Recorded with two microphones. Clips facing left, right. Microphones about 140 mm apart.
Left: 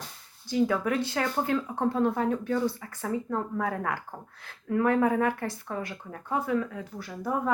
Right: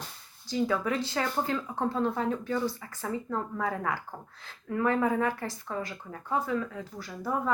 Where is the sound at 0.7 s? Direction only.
55° left (ahead or behind).